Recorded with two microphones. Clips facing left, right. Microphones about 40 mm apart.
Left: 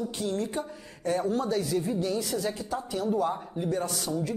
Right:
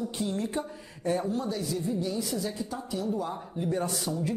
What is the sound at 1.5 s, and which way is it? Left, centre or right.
Speech, left.